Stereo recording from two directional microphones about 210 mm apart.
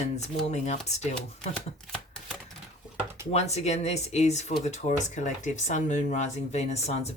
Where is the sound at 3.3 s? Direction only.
30° left (ahead or behind).